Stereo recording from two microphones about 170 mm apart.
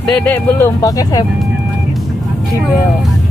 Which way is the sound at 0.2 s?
15° left (ahead or behind).